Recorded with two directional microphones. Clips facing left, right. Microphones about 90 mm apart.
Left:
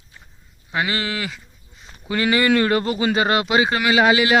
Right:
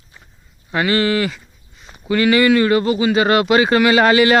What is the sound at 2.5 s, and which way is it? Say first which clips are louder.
Speech: right 4 dB; 40° left (ahead or behind).